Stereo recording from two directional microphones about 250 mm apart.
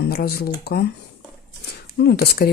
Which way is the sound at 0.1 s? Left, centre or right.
Left.